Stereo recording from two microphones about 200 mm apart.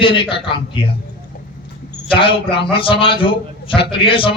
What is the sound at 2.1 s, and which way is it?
A man's voice, 25° left (ahead or behind).